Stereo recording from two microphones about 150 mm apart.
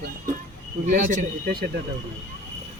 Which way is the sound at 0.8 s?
60° right (ahead or behind).